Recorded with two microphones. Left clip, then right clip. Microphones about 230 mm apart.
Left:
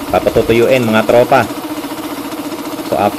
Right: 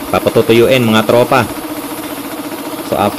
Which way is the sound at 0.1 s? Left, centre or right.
Right.